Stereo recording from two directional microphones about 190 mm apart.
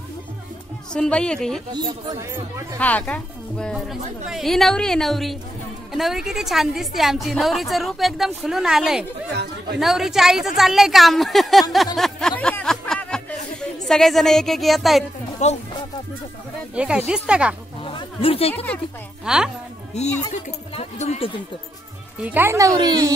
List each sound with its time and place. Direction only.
0.9 s a woman's voice: 5° left (ahead or behind)
1.7 s speech: 25° right (ahead or behind)
2.8 s a woman's voice: 10° left (ahead or behind)
11.7 s a sound: centre (ahead or behind)
15.4 s speech: 35° left (ahead or behind)
16.7 s a woman's voice: 5° right (ahead or behind)
17.8 s a sound: 30° left (ahead or behind)
18.5 s speech: 10° left (ahead or behind)
19.2 s a woman's voice: 5° right (ahead or behind)
19.9 s speech: 35° left (ahead or behind)
22.2 s speech: 10° right (ahead or behind)